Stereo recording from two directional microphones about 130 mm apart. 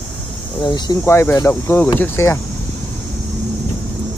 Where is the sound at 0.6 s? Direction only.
35° left (ahead or behind).